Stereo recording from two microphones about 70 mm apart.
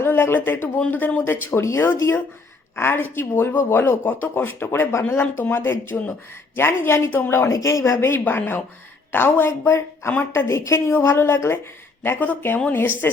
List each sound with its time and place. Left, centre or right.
0.0 s speech: left
5.2 s speech: left
8.2 s a woman's voice: left
10.1 s a woman's voice: left
10.5 s a woman's voice: left
12.2 s a woman's voice: left